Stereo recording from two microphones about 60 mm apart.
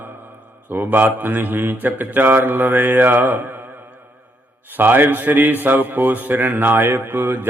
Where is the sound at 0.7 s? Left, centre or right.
Right.